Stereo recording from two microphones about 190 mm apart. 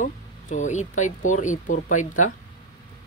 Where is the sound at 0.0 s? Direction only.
40° left (ahead or behind).